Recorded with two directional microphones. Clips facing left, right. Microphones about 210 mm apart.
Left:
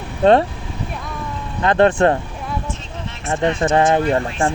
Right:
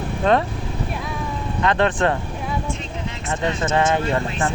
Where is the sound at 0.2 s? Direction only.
35° left (ahead or behind).